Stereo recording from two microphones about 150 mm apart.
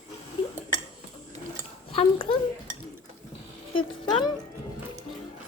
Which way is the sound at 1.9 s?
40° left (ahead or behind).